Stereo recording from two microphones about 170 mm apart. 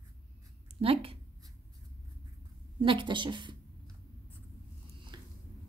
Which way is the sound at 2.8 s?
30° right (ahead or behind).